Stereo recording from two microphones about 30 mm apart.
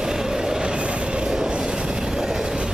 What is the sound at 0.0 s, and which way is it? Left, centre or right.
Vehicle, right.